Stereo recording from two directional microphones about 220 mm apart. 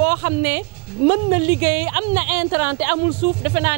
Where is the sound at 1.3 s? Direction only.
10° right (ahead or behind).